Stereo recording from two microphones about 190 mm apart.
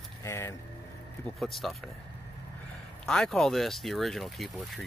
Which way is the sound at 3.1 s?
5° left (ahead or behind).